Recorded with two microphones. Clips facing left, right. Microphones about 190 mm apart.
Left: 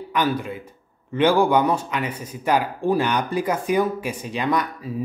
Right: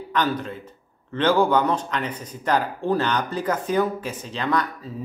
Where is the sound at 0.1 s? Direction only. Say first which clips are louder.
Left 1 dB; 10° left (ahead or behind).